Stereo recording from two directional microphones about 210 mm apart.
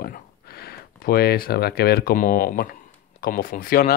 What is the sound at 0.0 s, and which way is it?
Speech, 45° left (ahead or behind).